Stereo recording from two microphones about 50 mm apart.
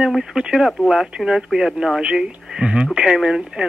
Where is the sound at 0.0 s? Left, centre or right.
Centre.